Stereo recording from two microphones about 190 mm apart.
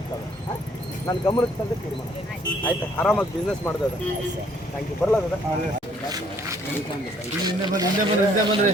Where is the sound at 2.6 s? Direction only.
5° left (ahead or behind).